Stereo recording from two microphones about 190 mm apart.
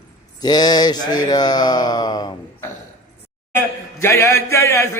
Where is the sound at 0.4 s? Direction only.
20° left (ahead or behind).